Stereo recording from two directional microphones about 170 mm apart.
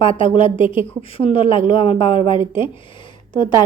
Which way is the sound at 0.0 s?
30° left (ahead or behind).